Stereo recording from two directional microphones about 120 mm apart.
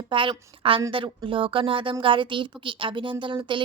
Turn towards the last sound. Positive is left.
turn(degrees=-45)  # may be behind; listen again after turning